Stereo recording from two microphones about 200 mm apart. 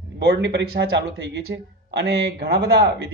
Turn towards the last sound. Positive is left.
turn(degrees=-60)  # may be behind; listen again after turning